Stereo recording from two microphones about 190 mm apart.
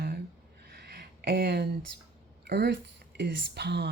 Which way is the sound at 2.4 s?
55° right (ahead or behind).